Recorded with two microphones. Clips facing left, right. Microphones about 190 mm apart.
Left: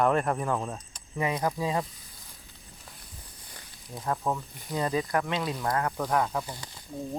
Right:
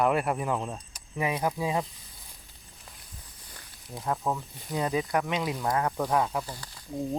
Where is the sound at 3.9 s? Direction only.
5° right (ahead or behind).